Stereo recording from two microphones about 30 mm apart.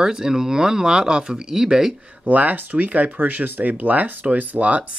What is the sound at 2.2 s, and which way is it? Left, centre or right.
Speech, right.